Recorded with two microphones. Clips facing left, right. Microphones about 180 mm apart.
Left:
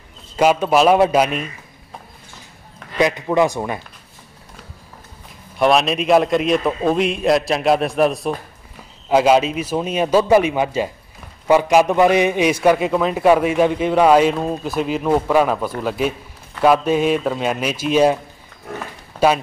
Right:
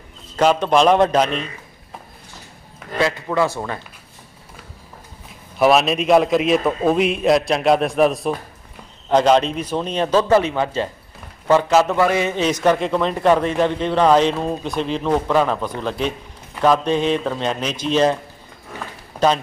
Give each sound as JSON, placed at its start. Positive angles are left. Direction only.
{"t": 0.4, "sound": "a man's voice", "side_deg": 10}
{"t": 3.0, "sound": "a man's voice", "side_deg": 20}
{"t": 5.6, "sound": "a man's voice", "side_deg": 0}